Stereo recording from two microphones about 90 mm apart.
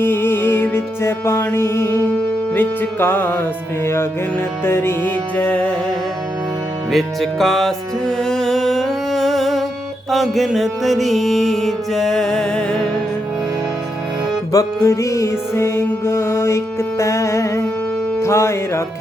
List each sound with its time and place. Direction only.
0.0 s music: 25° left (ahead or behind)
4.6 s music: 25° left (ahead or behind)
6.9 s music: centre (ahead or behind)
14.5 s music: 35° left (ahead or behind)